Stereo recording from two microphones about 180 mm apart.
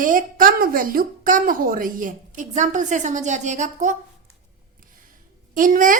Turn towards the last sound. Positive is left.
turn(degrees=-50)  # may be behind; listen again after turning